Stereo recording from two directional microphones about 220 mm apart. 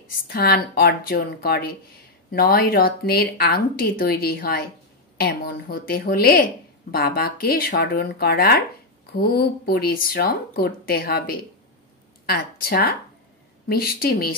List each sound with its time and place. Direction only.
0.1 s speech: 45° left (ahead or behind)